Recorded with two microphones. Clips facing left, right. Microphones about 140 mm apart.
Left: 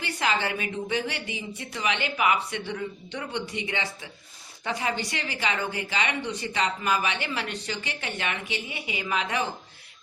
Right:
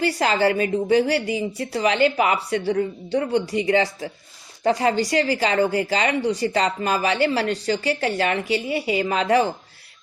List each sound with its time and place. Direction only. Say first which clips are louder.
0.0 s speech: right 8 dB; 40° right (ahead or behind)